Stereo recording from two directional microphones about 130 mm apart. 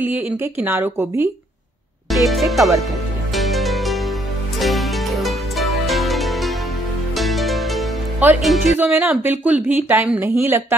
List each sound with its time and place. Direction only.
0.0 s a woman's voice: 15° right (ahead or behind)
2.0 s speech: centre (ahead or behind)
3.3 s music: centre (ahead or behind)
8.7 s a woman's voice: 15° right (ahead or behind)